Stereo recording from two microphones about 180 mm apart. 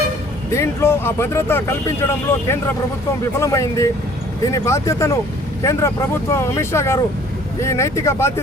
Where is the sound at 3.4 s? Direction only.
15° left (ahead or behind).